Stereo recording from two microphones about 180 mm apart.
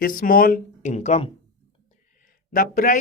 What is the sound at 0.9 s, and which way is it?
Speech, 40° left (ahead or behind).